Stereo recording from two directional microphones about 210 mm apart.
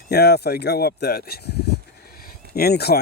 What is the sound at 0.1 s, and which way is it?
Speech, 50° left (ahead or behind).